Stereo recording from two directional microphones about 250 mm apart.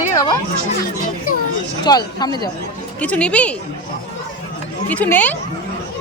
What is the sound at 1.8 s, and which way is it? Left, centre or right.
Speech, centre.